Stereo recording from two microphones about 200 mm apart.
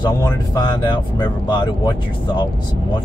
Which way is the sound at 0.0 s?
20° left (ahead or behind).